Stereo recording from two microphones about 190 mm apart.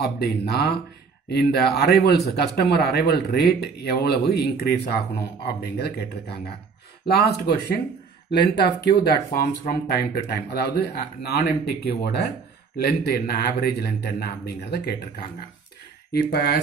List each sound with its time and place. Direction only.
0.0 s speech: 55° left (ahead or behind)
8.8 s speech: 55° left (ahead or behind)
16.1 s speech: 55° left (ahead or behind)